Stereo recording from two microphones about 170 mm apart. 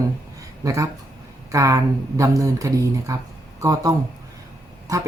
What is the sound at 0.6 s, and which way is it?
Speech, 20° right (ahead or behind).